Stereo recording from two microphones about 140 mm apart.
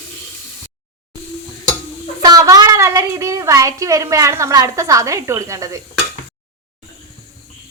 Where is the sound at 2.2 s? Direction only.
25° right (ahead or behind).